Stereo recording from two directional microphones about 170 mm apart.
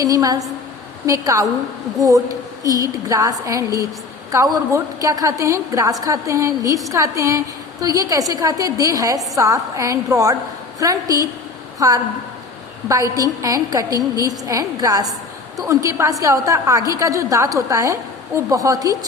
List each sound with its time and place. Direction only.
0.0 s a woman's voice: 20° right (ahead or behind)